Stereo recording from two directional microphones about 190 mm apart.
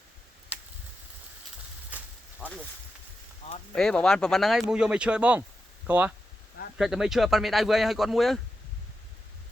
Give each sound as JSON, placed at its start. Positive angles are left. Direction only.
{"t": 2.4, "sound": "a sound", "side_deg": -5}
{"t": 3.4, "sound": "speech", "side_deg": 35}
{"t": 3.8, "sound": "speech", "side_deg": 5}